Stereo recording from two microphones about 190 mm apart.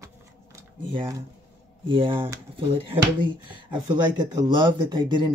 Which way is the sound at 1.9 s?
25° right (ahead or behind).